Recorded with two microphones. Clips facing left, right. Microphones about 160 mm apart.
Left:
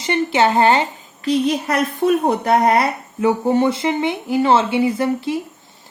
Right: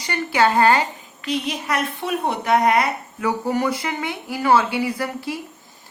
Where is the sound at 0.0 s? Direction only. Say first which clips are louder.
Left 3 dB; 25° left (ahead or behind).